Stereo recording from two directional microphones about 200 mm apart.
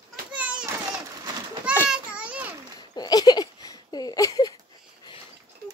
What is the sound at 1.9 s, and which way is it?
Children playing, 5° right (ahead or behind).